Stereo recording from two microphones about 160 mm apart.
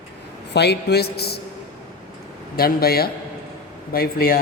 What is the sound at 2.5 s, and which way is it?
A man's voice, 70° left (ahead or behind).